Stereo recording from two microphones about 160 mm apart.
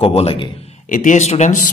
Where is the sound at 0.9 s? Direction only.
50° left (ahead or behind).